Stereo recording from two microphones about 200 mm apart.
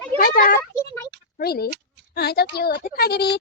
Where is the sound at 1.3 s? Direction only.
50° left (ahead or behind).